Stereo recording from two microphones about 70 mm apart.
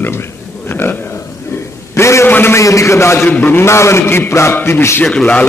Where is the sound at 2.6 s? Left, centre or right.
Left.